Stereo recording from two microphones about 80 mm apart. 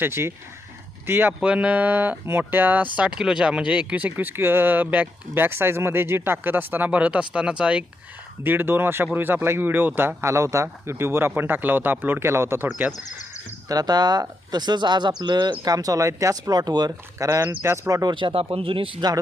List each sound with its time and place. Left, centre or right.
0.0 s speech: right
1.3 s speech: centre
3.0 s speech: centre
8.4 s speech: right
12.7 s speech: centre
13.7 s speech: right
15.6 s speech: right
16.5 s speech: right
17.4 s speech: right
18.1 s speech: right